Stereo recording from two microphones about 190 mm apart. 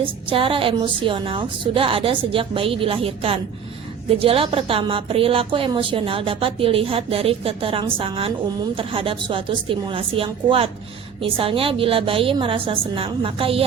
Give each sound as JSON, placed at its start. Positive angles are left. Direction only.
{"t": 0.0, "sound": "a woman's voice", "side_deg": -30}